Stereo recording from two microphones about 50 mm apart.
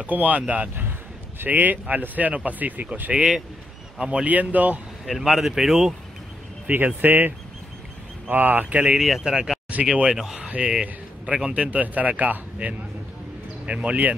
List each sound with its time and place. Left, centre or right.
0.0 s speech: right
3.1 s a man's voice: right
5.0 s speech: centre
7.0 s speech: right
8.9 s speech: centre
9.2 s a man's voice: centre